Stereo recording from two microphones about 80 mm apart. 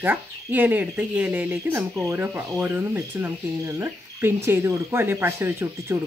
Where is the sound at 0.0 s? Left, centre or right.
Right.